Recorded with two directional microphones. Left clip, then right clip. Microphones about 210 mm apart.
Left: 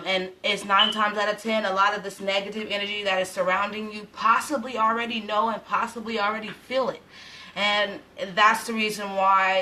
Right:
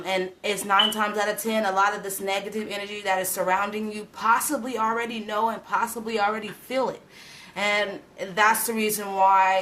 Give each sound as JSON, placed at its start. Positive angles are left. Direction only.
{"t": 0.0, "sound": "a woman's voice", "side_deg": -55}